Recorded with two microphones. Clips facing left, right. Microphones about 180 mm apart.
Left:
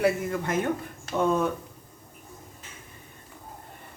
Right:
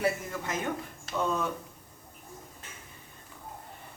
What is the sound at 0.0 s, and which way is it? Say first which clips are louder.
Speech: left 6 dB; 55° left (ahead or behind).